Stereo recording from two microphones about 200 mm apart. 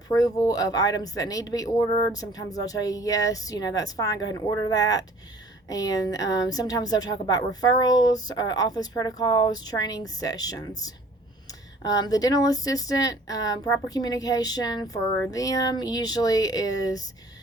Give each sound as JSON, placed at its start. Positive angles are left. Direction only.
{"t": 0.1, "sound": "a woman's voice", "side_deg": 15}